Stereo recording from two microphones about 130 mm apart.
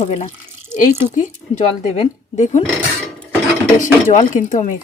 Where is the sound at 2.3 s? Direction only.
70° left (ahead or behind).